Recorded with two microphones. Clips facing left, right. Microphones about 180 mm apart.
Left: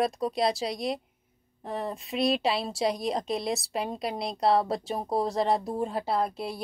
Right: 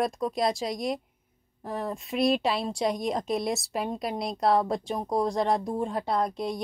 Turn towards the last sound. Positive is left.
turn(degrees=5)  # may be behind; listen again after turning